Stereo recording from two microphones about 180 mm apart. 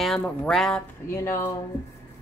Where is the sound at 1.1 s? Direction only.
15° left (ahead or behind).